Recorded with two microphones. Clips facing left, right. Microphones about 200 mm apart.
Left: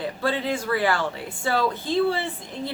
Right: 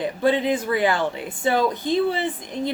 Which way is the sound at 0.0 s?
20° right (ahead or behind).